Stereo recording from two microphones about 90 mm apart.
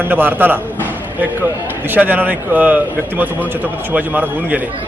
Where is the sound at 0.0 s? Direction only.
20° right (ahead or behind).